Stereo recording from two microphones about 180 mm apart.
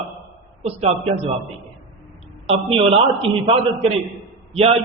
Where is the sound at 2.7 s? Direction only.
30° right (ahead or behind).